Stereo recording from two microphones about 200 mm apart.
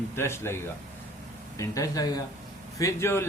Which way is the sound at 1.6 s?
15° left (ahead or behind).